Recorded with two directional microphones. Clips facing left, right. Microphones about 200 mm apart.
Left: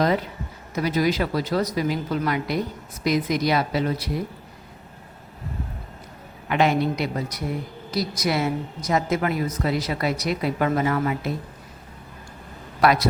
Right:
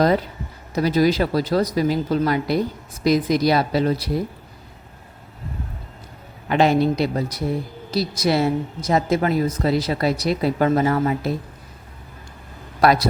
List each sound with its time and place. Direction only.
0.8 s a woman's voice: 35° right (ahead or behind)
6.5 s a woman's voice: 35° right (ahead or behind)
12.8 s a man's voice: 35° right (ahead or behind)